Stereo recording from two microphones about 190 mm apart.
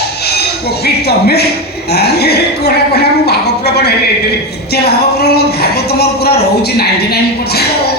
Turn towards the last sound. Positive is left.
turn(degrees=55)  # may be behind; listen again after turning